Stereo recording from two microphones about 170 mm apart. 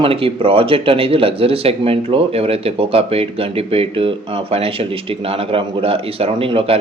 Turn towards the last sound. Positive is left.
turn(degrees=-35)  # may be behind; listen again after turning